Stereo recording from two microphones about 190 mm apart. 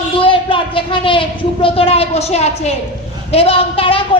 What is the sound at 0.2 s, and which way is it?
A woman's voice, 25° left (ahead or behind).